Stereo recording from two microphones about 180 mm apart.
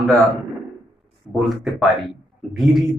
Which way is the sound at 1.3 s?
Centre (ahead or behind).